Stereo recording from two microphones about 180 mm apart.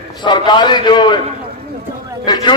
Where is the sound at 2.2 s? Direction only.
25° left (ahead or behind).